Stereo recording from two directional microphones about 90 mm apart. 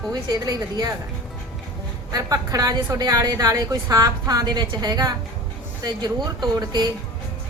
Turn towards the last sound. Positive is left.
turn(degrees=-50)  # may be behind; listen again after turning